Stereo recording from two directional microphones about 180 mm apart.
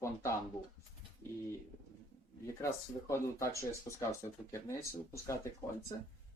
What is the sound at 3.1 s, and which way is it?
Speech, 15° left (ahead or behind).